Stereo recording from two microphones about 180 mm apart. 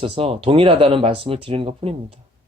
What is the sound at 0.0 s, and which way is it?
Speech, 30° right (ahead or behind).